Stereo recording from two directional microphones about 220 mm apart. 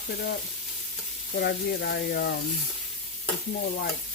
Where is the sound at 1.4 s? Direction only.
50° left (ahead or behind).